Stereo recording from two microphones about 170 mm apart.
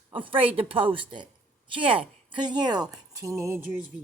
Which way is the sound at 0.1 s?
30° right (ahead or behind).